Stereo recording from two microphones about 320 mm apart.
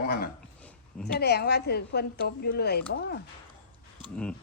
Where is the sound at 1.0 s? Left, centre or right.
Left.